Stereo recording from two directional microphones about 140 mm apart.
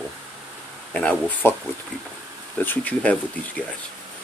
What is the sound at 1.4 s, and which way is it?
Speech, 15° left (ahead or behind).